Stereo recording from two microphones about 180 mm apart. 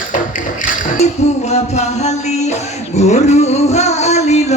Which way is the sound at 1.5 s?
40° left (ahead or behind).